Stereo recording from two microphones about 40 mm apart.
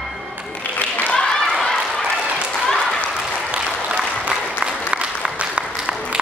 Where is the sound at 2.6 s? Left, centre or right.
Centre.